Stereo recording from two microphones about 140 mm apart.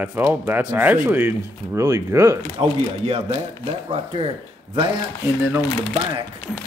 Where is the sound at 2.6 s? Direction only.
45° right (ahead or behind).